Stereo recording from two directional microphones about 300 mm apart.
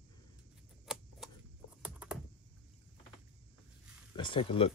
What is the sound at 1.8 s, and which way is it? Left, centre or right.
Computer keyboard, centre.